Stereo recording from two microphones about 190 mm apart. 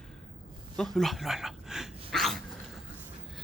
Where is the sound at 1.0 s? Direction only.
Centre (ahead or behind).